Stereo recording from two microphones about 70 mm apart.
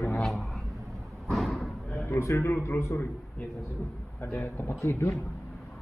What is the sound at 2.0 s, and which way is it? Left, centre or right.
Speech, left.